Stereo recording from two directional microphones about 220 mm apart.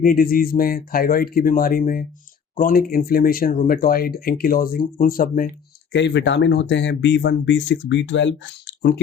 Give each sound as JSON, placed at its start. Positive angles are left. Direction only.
{"t": 0.0, "sound": "speech", "side_deg": 40}
{"t": 5.9, "sound": "speech", "side_deg": 55}